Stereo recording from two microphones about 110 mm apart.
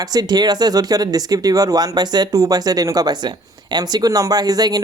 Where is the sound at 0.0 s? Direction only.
35° right (ahead or behind).